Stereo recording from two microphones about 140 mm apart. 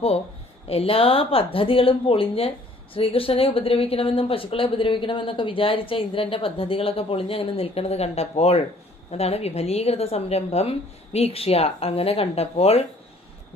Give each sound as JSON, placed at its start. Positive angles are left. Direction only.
{"t": 0.7, "sound": "a woman's voice", "side_deg": 45}